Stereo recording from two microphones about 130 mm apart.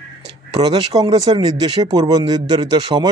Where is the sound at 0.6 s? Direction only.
30° right (ahead or behind).